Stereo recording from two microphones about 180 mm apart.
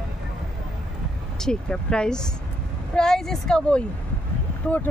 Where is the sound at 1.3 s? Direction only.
5° left (ahead or behind).